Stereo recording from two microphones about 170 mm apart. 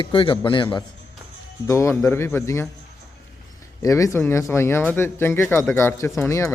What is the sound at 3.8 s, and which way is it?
Speech, 20° left (ahead or behind).